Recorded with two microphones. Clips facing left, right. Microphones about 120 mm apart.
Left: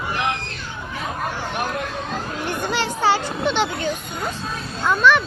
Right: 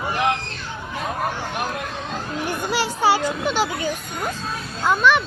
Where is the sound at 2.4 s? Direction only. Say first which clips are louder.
Even; 10° right (ahead or behind).